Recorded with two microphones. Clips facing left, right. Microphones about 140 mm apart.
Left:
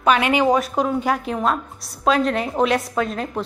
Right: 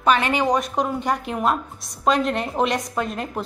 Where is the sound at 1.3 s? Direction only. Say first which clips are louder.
Even; 10° right (ahead or behind).